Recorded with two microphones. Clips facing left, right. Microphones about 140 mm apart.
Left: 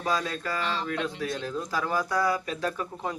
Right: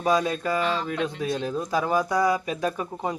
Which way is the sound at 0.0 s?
20° right (ahead or behind).